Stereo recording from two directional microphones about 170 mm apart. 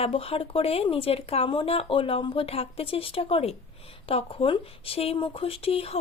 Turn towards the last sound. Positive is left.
turn(degrees=35)  # may be behind; listen again after turning